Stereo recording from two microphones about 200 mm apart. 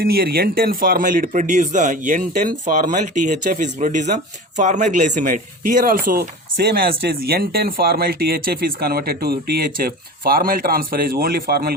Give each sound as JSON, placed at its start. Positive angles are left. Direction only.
{"t": 0.0, "sound": "speech", "side_deg": -50}